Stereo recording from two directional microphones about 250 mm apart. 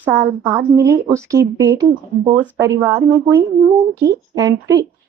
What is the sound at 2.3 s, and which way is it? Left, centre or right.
Speech, centre.